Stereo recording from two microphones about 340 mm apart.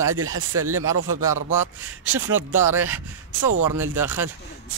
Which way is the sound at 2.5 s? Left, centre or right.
Centre.